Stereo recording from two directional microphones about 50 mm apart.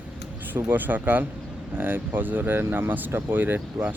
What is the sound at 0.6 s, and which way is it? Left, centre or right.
Speech, right.